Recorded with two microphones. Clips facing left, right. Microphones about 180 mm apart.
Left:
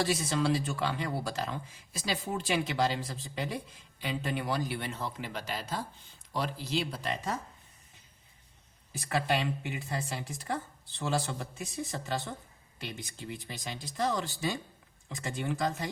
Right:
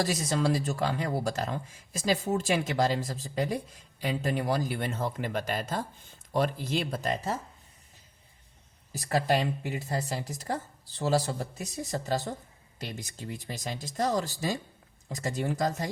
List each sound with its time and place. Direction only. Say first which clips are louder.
0.0 s speech: right 2 dB; 40° right (ahead or behind)
8.9 s speech: right 4 dB; 40° right (ahead or behind)